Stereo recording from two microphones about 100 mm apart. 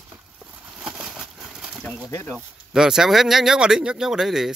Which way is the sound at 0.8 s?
10° right (ahead or behind).